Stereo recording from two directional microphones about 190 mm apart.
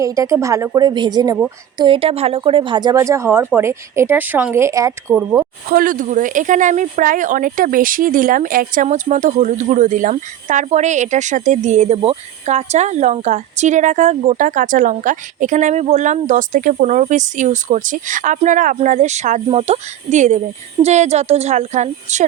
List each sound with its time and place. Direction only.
0.0 s speech: 15° right (ahead or behind)
5.6 s speech: 50° right (ahead or behind)